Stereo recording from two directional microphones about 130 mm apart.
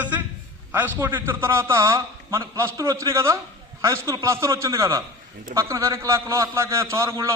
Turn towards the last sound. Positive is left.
turn(degrees=-20)  # may be behind; listen again after turning